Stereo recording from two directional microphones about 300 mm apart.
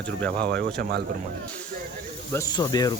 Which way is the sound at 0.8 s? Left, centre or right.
Right.